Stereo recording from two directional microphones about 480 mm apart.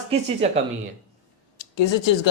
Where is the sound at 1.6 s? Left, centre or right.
Left.